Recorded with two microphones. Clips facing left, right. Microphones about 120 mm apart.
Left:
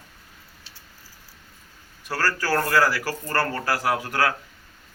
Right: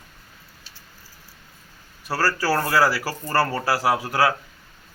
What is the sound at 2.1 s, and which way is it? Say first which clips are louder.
Speech: right 2 dB; 10° right (ahead or behind).